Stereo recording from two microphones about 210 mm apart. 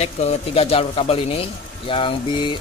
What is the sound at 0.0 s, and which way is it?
A man's voice, 30° left (ahead or behind).